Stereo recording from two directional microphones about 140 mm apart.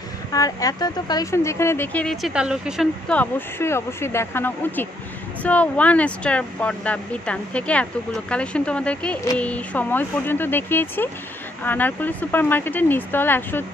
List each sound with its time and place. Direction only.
0.3 s speech: 25° left (ahead or behind)
2.0 s speech: 5° right (ahead or behind)
3.1 s speech: 15° left (ahead or behind)